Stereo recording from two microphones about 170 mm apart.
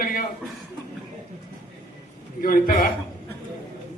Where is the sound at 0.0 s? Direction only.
55° left (ahead or behind).